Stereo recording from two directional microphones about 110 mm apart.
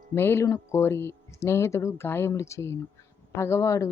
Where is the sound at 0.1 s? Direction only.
25° left (ahead or behind).